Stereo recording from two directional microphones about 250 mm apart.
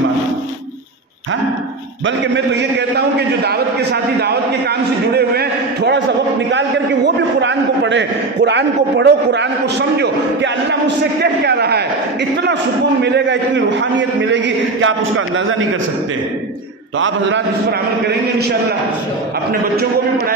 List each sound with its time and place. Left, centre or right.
2.0 s a man's voice: right
7.3 s a man's voice: right
13.0 s a man's voice: right
17.0 s a man's voice: right